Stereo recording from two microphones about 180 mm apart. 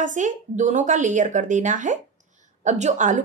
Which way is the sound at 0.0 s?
45° right (ahead or behind).